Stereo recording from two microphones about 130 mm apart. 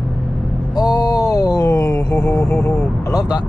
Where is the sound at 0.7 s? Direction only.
30° left (ahead or behind).